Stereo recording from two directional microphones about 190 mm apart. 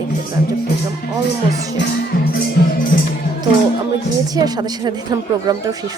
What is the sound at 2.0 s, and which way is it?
Music, 50° left (ahead or behind).